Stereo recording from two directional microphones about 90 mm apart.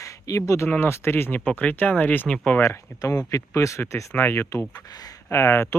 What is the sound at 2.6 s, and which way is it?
Speech, 40° left (ahead or behind).